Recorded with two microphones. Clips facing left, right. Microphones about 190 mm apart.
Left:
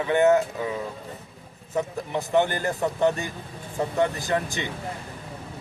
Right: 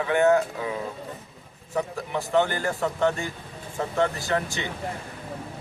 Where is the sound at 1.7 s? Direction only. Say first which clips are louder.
Left 1 dB; 20° left (ahead or behind).